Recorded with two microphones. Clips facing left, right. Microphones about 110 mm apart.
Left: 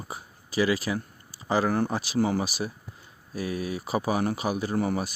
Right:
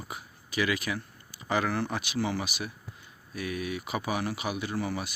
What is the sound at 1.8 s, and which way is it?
Speech, 35° left (ahead or behind).